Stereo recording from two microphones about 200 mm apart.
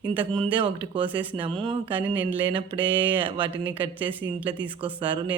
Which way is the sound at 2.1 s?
25° right (ahead or behind).